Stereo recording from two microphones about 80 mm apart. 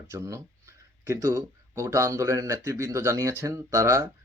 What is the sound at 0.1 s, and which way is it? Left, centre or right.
Speech, right.